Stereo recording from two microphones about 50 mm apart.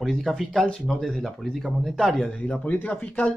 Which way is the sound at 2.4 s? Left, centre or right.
Left.